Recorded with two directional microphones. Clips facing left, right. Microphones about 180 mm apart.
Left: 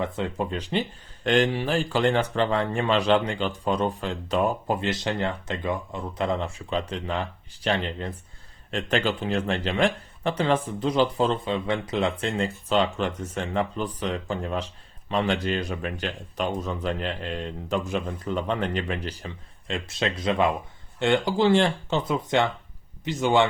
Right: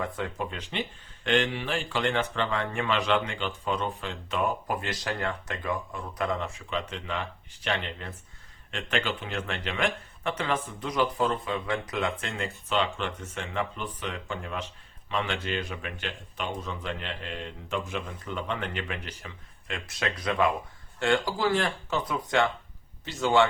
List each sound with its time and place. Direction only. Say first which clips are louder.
0.0 s a man's voice: left 4 dB; 30° left (ahead or behind)